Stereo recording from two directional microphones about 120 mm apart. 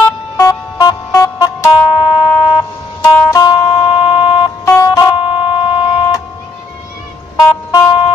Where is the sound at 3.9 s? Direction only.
50° left (ahead or behind).